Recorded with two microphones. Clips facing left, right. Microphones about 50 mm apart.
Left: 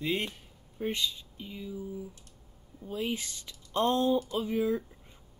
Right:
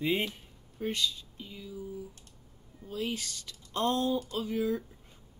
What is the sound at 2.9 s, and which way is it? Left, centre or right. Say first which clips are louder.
Speech: left 1 dB; centre.